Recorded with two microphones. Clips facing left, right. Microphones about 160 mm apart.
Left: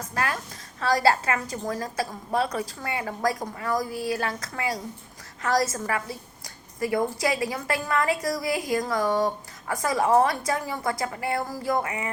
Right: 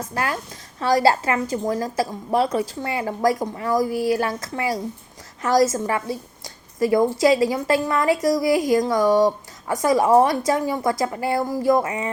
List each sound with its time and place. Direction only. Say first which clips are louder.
0.1 s a woman's voice: right 1 dB; 30° right (ahead or behind)